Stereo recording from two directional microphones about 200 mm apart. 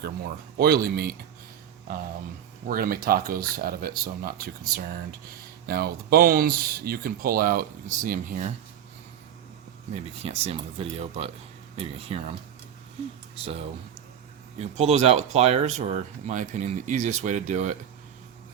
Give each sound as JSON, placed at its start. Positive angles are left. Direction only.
{"t": 0.5, "sound": "speech", "side_deg": -50}
{"t": 2.6, "sound": "speech", "side_deg": -45}
{"t": 9.9, "sound": "speech", "side_deg": -30}
{"t": 13.4, "sound": "speech", "side_deg": -30}